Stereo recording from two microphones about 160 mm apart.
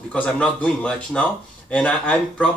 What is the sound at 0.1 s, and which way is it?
Speech, 5° left (ahead or behind).